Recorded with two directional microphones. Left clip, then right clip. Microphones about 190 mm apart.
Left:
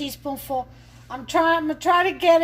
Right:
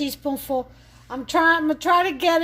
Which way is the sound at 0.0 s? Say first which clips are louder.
Right 3 dB; 60° right (ahead or behind).